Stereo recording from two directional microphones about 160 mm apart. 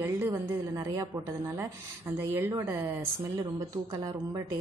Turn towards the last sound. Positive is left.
turn(degrees=-20)  # may be behind; listen again after turning